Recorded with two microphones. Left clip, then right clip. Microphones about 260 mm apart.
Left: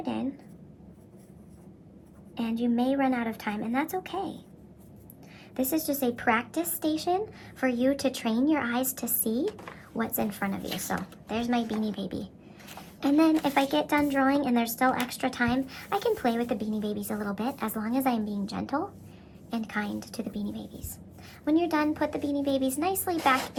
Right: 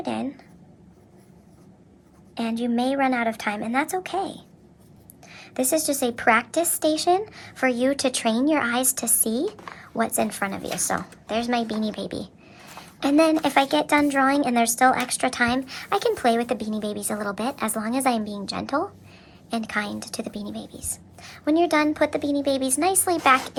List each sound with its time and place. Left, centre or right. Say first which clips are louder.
0.0 s whispering: right 5 dB; right
2.3 s a woman's voice: right 4 dB; right